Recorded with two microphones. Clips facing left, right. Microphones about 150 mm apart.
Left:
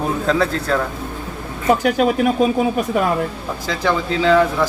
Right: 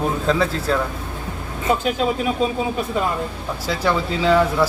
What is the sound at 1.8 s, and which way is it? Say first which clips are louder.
Speech: left 5 dB; 75° left (ahead or behind).